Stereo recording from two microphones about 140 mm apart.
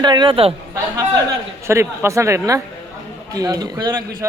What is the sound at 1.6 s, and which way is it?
A man's voice, 20° right (ahead or behind).